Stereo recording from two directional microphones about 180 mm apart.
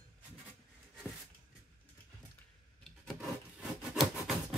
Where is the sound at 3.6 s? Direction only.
Centre (ahead or behind).